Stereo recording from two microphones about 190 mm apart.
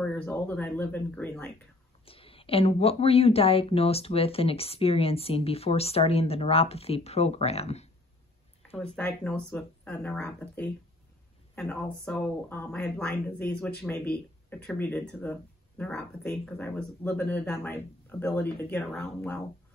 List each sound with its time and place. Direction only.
0.0 s speech: 10° left (ahead or behind)
2.0 s speech: 30° left (ahead or behind)
8.7 s speech: 5° left (ahead or behind)